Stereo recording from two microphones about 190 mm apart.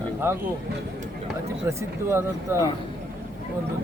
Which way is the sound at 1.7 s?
15° right (ahead or behind).